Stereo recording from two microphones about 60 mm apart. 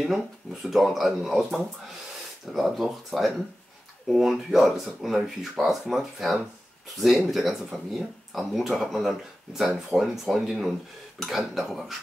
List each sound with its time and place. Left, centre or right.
0.0 s speech: centre